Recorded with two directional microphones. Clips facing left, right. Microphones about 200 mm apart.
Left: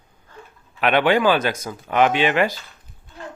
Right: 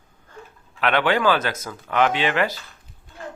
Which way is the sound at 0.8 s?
15° left (ahead or behind).